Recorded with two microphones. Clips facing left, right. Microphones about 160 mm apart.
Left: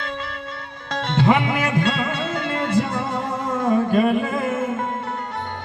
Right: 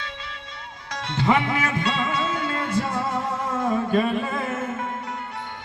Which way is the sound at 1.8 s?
60° left (ahead or behind).